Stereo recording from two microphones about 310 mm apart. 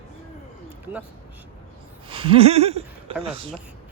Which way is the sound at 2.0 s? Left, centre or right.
Centre.